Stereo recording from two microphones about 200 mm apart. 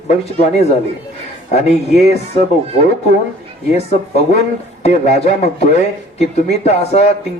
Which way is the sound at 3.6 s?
35° left (ahead or behind).